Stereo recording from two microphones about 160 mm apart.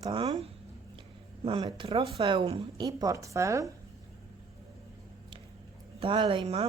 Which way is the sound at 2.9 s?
20° right (ahead or behind).